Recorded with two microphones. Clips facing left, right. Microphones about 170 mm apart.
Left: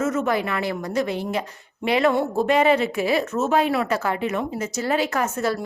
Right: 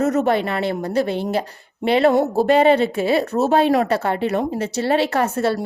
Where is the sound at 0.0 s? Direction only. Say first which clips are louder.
Right 4 dB; 40° right (ahead or behind).